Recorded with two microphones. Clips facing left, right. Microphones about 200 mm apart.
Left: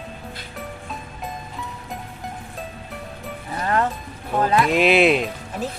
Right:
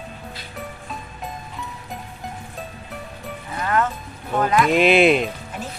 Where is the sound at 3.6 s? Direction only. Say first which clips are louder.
Even; 30° left (ahead or behind).